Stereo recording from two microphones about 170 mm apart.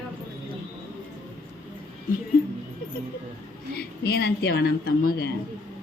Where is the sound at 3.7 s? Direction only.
65° left (ahead or behind).